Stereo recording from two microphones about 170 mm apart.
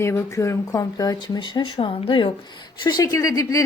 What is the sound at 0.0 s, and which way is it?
A woman's voice, 15° left (ahead or behind).